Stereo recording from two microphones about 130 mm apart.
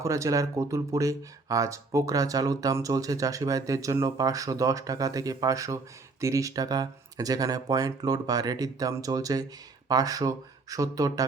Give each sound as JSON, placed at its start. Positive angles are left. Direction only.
{"t": 0.0, "sound": "speech", "side_deg": -25}